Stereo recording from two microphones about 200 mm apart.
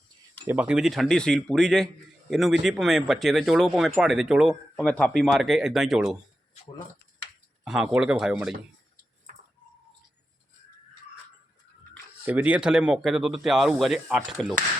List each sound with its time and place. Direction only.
0.4 s speech: 5° right (ahead or behind)
7.6 s speech: 5° right (ahead or behind)
12.2 s speech: 10° right (ahead or behind)